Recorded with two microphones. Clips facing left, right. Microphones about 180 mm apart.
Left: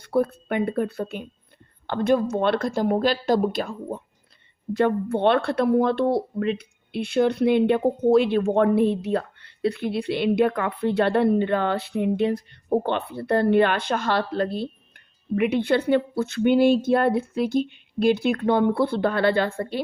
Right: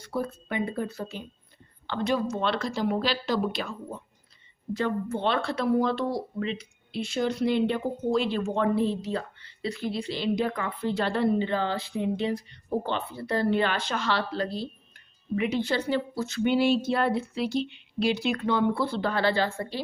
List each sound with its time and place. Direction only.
0.0 s speech: 60° left (ahead or behind)